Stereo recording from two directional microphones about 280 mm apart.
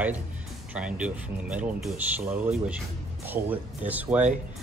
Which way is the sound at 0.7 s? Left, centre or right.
Centre.